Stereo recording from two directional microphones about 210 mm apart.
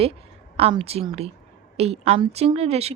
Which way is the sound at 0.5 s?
30° right (ahead or behind).